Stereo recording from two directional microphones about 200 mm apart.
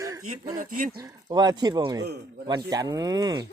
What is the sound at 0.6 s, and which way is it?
Speech, 40° right (ahead or behind).